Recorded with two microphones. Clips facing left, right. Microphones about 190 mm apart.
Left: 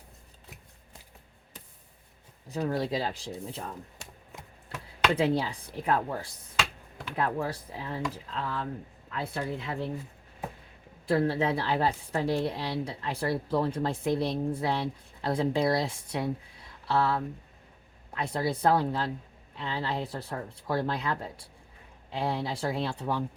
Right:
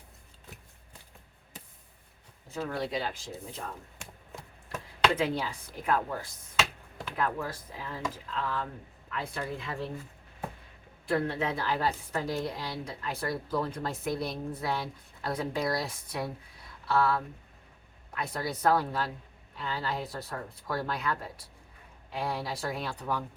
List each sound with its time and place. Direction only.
2.6 s speech: 35° left (ahead or behind)
5.1 s speech: 35° left (ahead or behind)
7.2 s a woman's voice: 30° left (ahead or behind)
11.1 s a woman's voice: 30° left (ahead or behind)